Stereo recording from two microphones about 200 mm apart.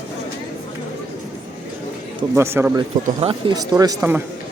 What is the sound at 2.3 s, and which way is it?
Speech, 10° right (ahead or behind).